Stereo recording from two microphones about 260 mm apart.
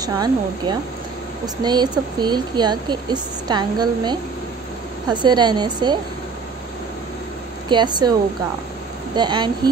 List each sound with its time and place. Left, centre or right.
0.0 s speech: centre
7.7 s speech: centre
9.1 s speech: centre